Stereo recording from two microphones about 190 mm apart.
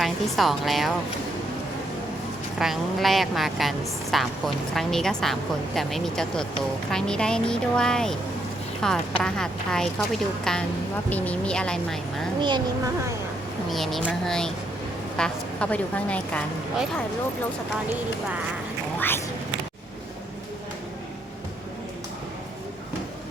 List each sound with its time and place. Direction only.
0.0 s a woman's voice: centre (ahead or behind)
2.6 s a woman's voice: centre (ahead or behind)
12.4 s speech: 25° right (ahead or behind)
13.7 s a woman's voice: centre (ahead or behind)
18.9 s speech: 10° left (ahead or behind)